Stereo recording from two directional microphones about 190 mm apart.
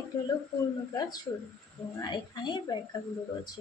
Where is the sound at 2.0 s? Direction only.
25° left (ahead or behind).